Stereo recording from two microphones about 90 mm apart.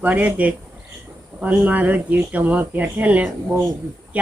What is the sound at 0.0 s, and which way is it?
Speech, 15° right (ahead or behind).